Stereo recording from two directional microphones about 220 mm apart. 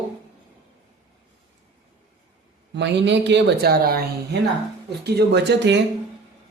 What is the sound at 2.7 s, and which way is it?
Speech, 50° right (ahead or behind).